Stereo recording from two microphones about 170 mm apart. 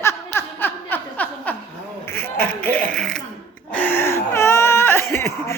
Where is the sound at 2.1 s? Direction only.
10° left (ahead or behind).